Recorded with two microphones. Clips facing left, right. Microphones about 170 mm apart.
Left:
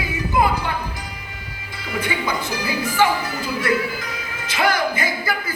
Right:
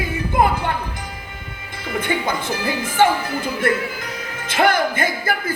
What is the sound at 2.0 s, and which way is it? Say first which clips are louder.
Music: right 2 dB; 50° right (ahead or behind).